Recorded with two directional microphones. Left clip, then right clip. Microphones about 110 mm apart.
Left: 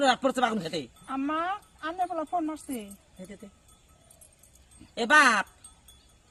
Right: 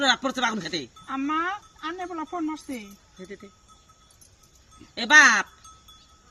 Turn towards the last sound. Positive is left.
turn(degrees=50)  # may be behind; listen again after turning